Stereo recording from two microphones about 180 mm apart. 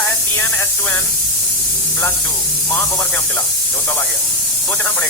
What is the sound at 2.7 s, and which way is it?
Speech, 20° left (ahead or behind).